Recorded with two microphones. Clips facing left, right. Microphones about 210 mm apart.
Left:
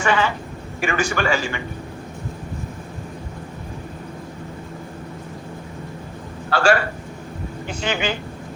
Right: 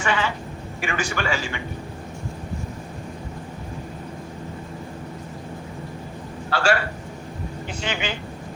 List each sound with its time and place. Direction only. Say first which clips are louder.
0.0 s a man's voice: left 4 dB; 45° left (ahead or behind)
6.5 s a man's voice: left 4 dB; 45° left (ahead or behind)